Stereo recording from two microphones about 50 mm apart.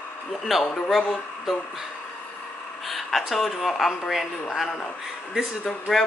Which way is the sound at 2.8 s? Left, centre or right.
Centre.